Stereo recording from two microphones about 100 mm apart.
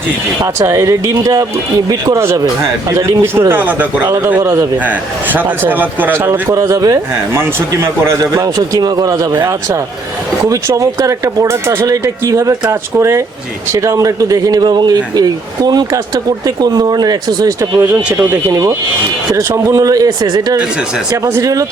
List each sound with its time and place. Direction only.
0.6 s a man's voice: 30° right (ahead or behind)
6.5 s a man's voice: 35° right (ahead or behind)
8.2 s speech: 35° right (ahead or behind)
10.5 s speech: 35° right (ahead or behind)
17.6 s a man's voice: 25° right (ahead or behind)
19.3 s speech: 35° right (ahead or behind)
21.2 s speech: 30° right (ahead or behind)